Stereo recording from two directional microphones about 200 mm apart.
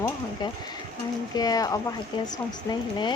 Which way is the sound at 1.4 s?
20° left (ahead or behind).